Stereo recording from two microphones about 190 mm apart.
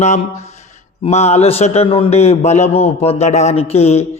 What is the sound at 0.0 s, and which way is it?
A man's voice, 35° left (ahead or behind).